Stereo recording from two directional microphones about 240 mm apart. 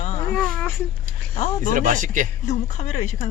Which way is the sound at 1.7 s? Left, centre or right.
Right.